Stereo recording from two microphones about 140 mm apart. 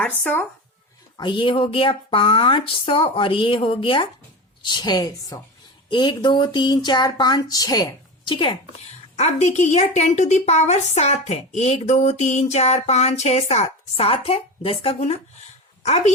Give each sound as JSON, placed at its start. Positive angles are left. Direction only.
{"t": 0.0, "sound": "speech", "side_deg": 10}
{"t": 1.1, "sound": "speech", "side_deg": 35}
{"t": 8.9, "sound": "a woman's voice", "side_deg": 50}